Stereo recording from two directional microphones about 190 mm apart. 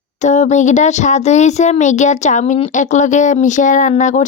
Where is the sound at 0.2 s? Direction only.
40° left (ahead or behind).